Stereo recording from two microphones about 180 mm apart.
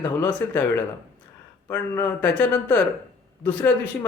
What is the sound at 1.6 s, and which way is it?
Speech, 10° left (ahead or behind).